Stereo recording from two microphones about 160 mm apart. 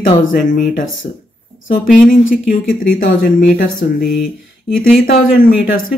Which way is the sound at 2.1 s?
60° left (ahead or behind).